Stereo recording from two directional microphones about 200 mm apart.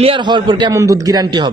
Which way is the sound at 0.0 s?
25° right (ahead or behind).